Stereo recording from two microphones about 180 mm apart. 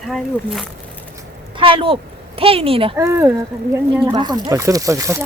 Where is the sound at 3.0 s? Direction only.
15° right (ahead or behind).